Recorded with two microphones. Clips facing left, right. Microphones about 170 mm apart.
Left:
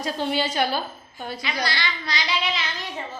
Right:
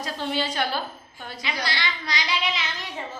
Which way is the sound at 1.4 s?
15° right (ahead or behind).